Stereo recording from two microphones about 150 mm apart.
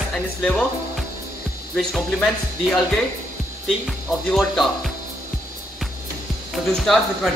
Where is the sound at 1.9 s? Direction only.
Centre (ahead or behind).